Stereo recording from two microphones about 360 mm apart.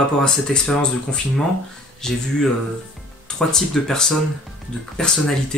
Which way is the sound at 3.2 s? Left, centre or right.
Centre.